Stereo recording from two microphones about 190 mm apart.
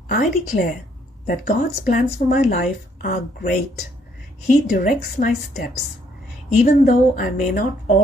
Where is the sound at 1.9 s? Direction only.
50° left (ahead or behind).